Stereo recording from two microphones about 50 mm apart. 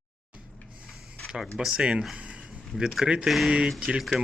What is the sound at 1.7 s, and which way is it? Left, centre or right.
Speech, right.